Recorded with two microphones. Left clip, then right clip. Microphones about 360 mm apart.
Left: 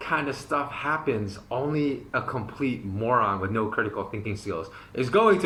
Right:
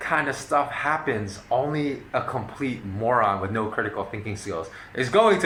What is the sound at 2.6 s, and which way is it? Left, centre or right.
Speech, centre.